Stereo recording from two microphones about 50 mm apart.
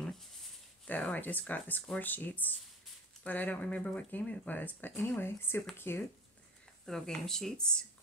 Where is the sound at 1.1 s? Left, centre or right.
Left.